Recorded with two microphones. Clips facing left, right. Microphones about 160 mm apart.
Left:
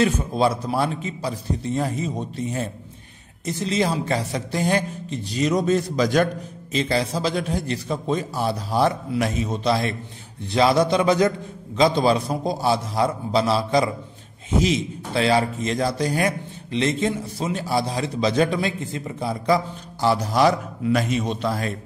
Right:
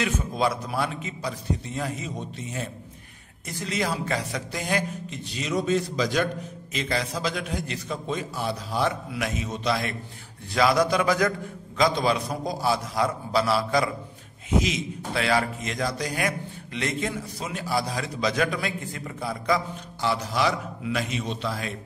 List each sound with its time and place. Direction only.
0.0 s a man's voice: 30° left (ahead or behind)
6.7 s a man's voice: 30° left (ahead or behind)